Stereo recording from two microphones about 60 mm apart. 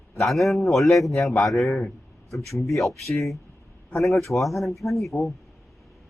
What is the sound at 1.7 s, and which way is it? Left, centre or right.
Speech, centre.